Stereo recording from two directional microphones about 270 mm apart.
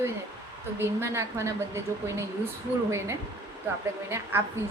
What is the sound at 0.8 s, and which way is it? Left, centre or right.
A woman's voice, centre.